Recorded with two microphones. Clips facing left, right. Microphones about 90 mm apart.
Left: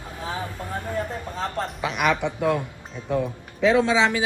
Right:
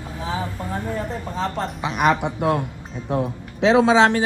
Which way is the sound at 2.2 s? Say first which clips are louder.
Right 2 dB; 55° right (ahead or behind).